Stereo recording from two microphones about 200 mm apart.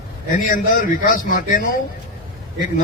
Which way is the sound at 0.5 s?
45° left (ahead or behind).